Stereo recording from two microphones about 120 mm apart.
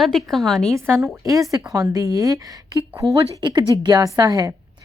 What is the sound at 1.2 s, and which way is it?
A woman's voice, 25° right (ahead or behind).